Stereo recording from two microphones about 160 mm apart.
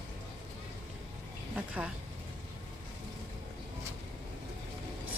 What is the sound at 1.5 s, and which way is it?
Speech, 10° right (ahead or behind).